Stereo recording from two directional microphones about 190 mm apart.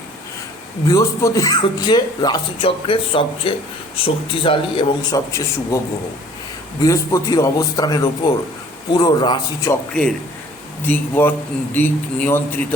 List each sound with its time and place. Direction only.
0.9 s speech: 15° left (ahead or behind)
5.7 s speech: 15° left (ahead or behind)
9.9 s a man's voice: 5° left (ahead or behind)